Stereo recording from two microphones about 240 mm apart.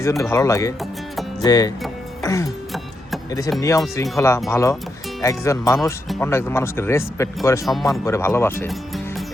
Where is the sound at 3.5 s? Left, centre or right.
Centre.